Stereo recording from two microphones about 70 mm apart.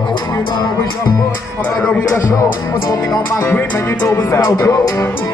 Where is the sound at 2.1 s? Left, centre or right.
Left.